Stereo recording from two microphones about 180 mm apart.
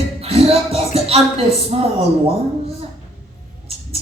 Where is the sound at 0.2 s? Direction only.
35° right (ahead or behind).